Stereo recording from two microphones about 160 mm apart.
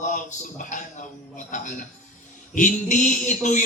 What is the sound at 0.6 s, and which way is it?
A man's voice, 55° left (ahead or behind).